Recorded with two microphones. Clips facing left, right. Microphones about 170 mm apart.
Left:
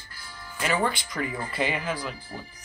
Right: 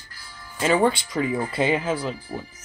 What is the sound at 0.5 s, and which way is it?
Speech, 25° right (ahead or behind).